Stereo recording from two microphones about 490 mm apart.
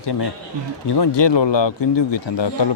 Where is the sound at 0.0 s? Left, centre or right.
Left.